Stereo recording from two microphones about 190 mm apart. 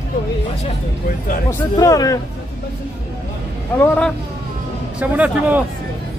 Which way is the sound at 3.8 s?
5° left (ahead or behind).